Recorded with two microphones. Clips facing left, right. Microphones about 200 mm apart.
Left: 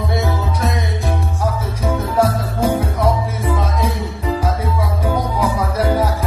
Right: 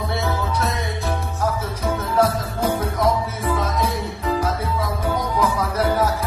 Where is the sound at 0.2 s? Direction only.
15° left (ahead or behind).